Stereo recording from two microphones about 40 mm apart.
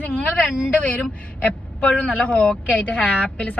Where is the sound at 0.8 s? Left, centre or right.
Left.